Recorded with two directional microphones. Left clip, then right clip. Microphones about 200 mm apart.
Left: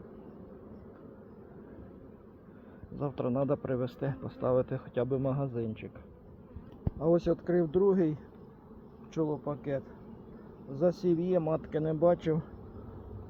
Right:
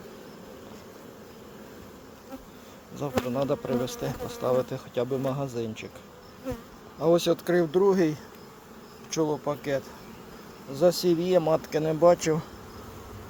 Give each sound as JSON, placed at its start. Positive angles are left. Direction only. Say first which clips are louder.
{"t": 3.0, "sound": "speech", "louder": "right 4 dB", "side_deg": -15}
{"t": 7.0, "sound": "speech", "louder": "right 5 dB", "side_deg": -10}
{"t": 9.3, "sound": "speech", "louder": "right 6 dB", "side_deg": -20}